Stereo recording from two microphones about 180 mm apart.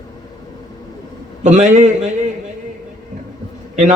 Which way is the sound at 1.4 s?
40° right (ahead or behind).